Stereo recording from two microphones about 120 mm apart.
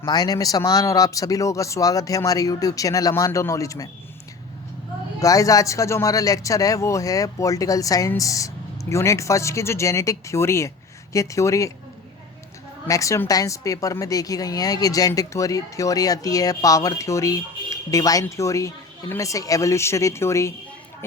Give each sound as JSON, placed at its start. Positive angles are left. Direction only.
{"t": 0.0, "sound": "speech", "side_deg": 35}
{"t": 5.2, "sound": "speech", "side_deg": 30}
{"t": 12.9, "sound": "speech", "side_deg": 25}